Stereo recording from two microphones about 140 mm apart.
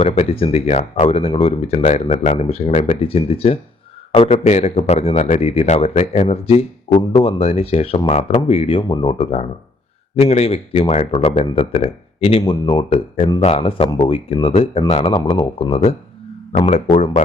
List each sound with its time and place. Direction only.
0.0 s speech: 45° left (ahead or behind)
16.5 s speech: 55° left (ahead or behind)